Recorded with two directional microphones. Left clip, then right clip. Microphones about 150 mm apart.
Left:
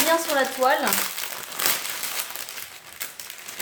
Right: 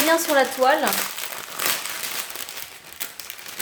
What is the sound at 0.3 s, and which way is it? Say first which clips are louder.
Speech: right 4 dB; 45° right (ahead or behind).